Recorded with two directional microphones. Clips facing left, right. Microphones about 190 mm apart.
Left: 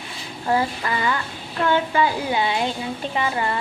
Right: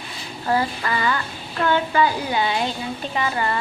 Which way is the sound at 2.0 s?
25° left (ahead or behind).